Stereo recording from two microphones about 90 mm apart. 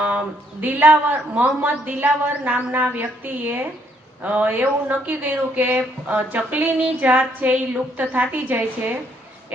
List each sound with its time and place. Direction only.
0.6 s a man's voice: 20° right (ahead or behind)